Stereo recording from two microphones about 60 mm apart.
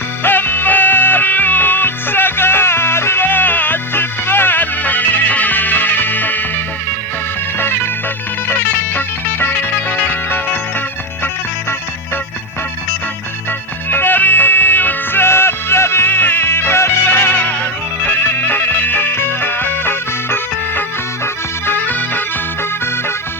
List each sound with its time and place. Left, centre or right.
0.2 s music: left
9.0 s music: left
13.9 s music: left